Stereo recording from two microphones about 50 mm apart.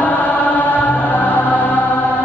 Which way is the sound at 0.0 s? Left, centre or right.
Left.